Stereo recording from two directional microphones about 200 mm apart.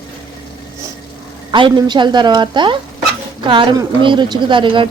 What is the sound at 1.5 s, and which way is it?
A woman's voice, 25° right (ahead or behind).